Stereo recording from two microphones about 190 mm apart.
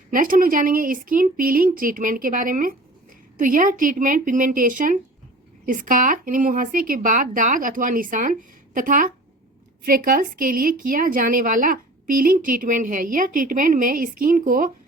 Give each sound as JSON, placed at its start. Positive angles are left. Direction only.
{"t": 0.1, "sound": "a woman's voice", "side_deg": -45}